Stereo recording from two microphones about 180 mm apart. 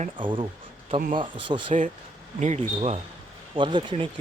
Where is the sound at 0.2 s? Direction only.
25° right (ahead or behind).